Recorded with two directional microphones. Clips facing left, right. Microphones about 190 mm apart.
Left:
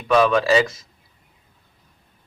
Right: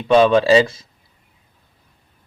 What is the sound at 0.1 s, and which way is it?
Speech, 30° right (ahead or behind).